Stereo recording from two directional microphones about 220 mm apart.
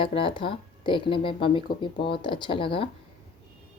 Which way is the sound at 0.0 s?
25° left (ahead or behind).